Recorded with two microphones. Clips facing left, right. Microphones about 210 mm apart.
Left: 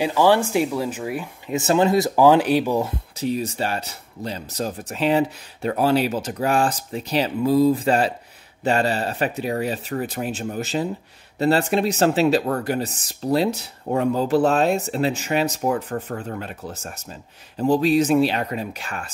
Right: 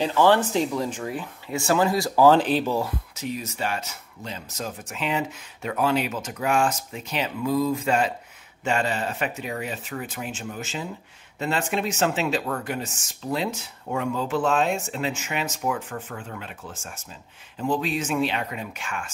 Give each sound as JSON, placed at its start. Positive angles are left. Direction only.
{"t": 0.0, "sound": "speech", "side_deg": 10}
{"t": 2.8, "sound": "speech", "side_deg": 30}